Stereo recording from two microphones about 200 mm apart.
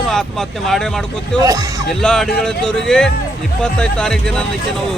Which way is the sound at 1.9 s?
Centre (ahead or behind).